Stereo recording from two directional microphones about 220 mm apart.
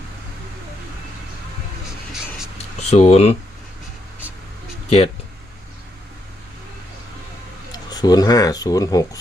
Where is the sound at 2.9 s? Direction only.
30° left (ahead or behind).